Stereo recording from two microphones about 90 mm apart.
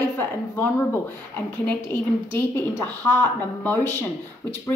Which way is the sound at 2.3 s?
25° left (ahead or behind).